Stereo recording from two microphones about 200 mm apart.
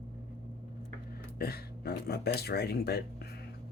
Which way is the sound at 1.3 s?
50° left (ahead or behind).